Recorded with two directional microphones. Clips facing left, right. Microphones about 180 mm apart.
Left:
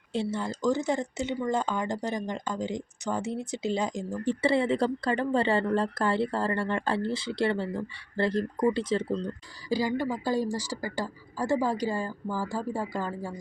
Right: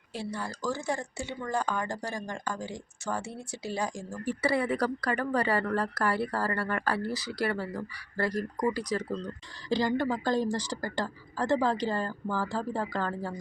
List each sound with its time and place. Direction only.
0.1 s speech: 25° left (ahead or behind)
9.6 s speech: 10° left (ahead or behind)